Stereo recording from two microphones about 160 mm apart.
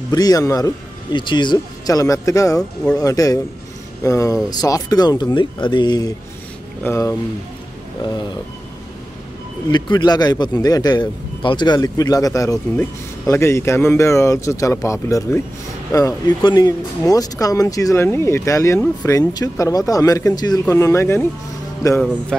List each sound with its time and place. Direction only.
0.1 s speech: 20° left (ahead or behind)
9.7 s speech: 30° left (ahead or behind)